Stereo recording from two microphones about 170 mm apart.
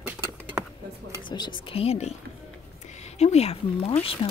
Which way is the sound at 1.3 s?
25° left (ahead or behind).